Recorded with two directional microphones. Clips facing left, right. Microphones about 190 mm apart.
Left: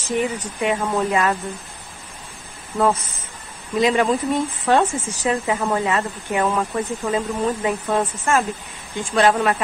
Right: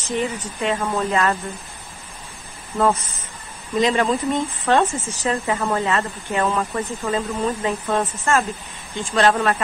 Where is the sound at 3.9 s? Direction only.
Centre (ahead or behind).